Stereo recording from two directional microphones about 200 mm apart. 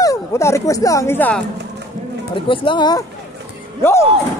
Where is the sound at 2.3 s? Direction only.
25° left (ahead or behind).